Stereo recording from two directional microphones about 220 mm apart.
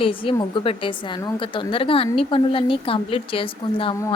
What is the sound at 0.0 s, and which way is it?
A woman's voice, 25° left (ahead or behind).